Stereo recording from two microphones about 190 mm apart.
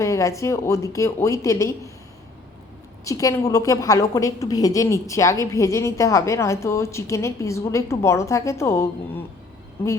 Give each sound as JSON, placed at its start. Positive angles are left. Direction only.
{"t": 0.0, "sound": "a woman's voice", "side_deg": 15}
{"t": 3.0, "sound": "a woman's voice", "side_deg": 15}